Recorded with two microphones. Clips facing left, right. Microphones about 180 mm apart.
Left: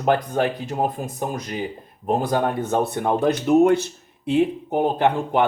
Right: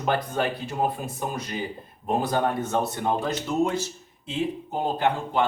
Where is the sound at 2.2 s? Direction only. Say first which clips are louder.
Left 3 dB; 50° left (ahead or behind).